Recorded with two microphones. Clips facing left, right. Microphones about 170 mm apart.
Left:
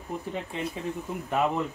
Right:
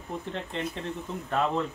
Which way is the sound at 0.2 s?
10° left (ahead or behind).